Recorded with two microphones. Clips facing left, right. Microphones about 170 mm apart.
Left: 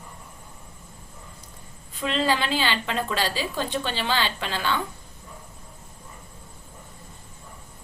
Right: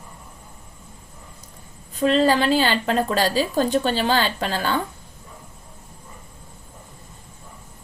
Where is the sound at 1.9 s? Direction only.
40° right (ahead or behind).